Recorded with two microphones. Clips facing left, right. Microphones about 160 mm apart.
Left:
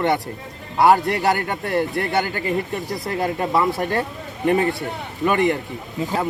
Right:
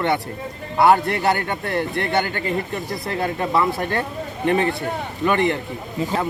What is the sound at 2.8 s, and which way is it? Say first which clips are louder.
Speech: left 1 dB; 15° left (ahead or behind).